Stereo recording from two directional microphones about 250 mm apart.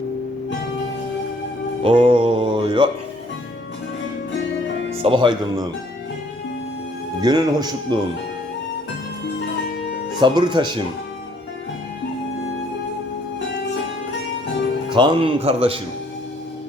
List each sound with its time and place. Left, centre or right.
1.8 s music: right
5.0 s music: centre
7.2 s speech: centre
10.2 s speech: centre
14.9 s music: centre